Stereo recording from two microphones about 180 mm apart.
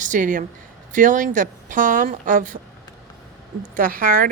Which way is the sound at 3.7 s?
50° right (ahead or behind).